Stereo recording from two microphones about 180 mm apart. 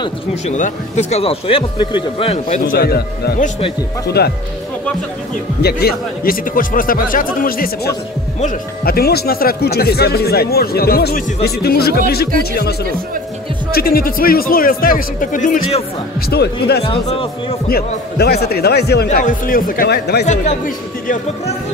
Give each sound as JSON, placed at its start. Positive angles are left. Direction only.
{"t": 0.5, "sound": "speech", "side_deg": 40}
{"t": 2.6, "sound": "speech", "side_deg": 55}
{"t": 5.6, "sound": "speech", "side_deg": 60}
{"t": 13.7, "sound": "speech", "side_deg": 55}
{"t": 16.3, "sound": "speech", "side_deg": 65}
{"t": 16.8, "sound": "speech", "side_deg": 30}
{"t": 17.6, "sound": "speech", "side_deg": 60}
{"t": 19.0, "sound": "speech", "side_deg": 50}
{"t": 20.2, "sound": "speech", "side_deg": 45}